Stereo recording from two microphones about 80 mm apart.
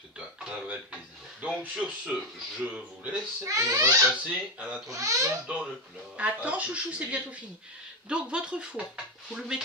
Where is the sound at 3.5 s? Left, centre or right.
Right.